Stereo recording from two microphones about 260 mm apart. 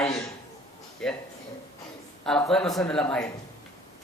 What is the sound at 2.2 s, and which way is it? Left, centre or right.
Speech, centre.